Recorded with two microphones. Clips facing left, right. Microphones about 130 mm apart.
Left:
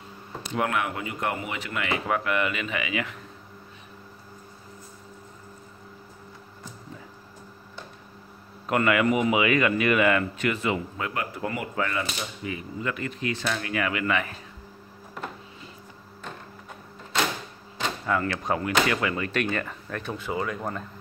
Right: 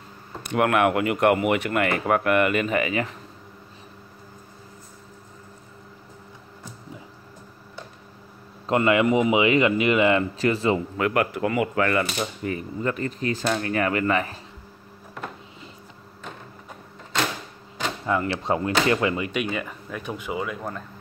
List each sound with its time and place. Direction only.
0.4 s speech: 65° right (ahead or behind); by 3.2 s 40° right (ahead or behind)
8.6 s speech: 25° right (ahead or behind)
11.0 s speech: 70° right (ahead or behind)
12.2 s speech: 45° right (ahead or behind)
18.0 s speech: 20° right (ahead or behind)
19.2 s speech: 10° right (ahead or behind)